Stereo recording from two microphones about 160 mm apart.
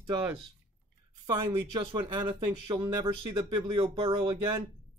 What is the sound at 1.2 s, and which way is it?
Speech, 25° right (ahead or behind).